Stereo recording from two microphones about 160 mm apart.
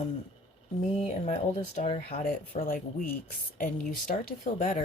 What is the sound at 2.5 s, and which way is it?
Speech, 60° left (ahead or behind).